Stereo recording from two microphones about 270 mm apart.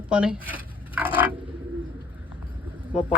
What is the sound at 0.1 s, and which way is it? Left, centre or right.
Speech, centre.